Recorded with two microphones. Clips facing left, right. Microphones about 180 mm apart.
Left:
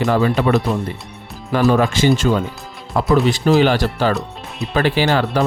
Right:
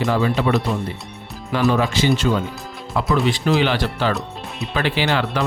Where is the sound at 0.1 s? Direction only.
50° left (ahead or behind).